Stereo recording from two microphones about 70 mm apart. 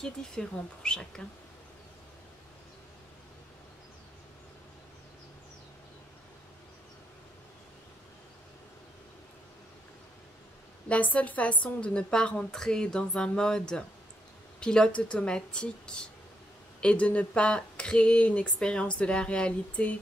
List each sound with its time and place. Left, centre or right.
0.0 s a woman's voice: centre
10.9 s a woman's voice: left